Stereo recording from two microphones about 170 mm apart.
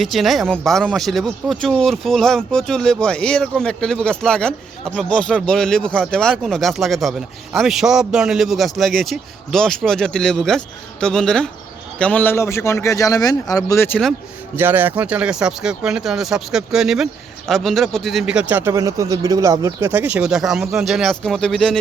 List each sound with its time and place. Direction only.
0.0 s a man's voice: centre (ahead or behind)
14.5 s speech: 10° right (ahead or behind)